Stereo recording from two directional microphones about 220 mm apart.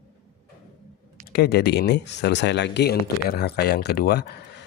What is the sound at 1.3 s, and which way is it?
Speech, 45° left (ahead or behind).